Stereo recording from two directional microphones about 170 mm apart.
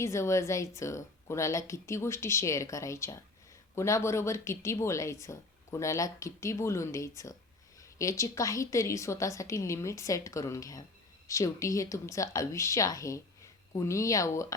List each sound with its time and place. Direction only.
0.0 s a woman's voice: 15° left (ahead or behind)